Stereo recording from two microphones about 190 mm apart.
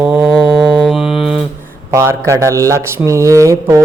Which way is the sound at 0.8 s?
Centre (ahead or behind).